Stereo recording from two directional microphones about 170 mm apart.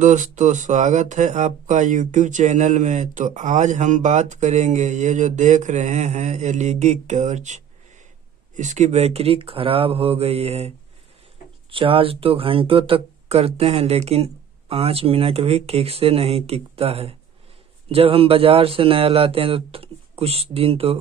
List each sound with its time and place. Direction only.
0.0 s speech: 45° right (ahead or behind)
11.7 s speech: 30° right (ahead or behind)